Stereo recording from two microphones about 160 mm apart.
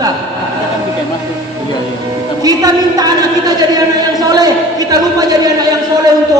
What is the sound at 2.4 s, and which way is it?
A woman's voice, 25° right (ahead or behind).